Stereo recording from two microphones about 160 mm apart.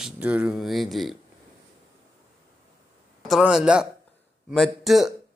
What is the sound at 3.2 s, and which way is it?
A man's voice, centre (ahead or behind).